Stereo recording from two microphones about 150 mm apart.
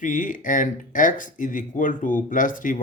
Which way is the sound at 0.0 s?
60° left (ahead or behind).